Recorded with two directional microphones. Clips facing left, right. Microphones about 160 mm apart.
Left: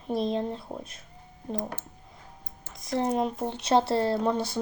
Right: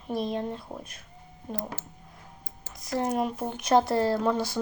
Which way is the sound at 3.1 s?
25° left (ahead or behind).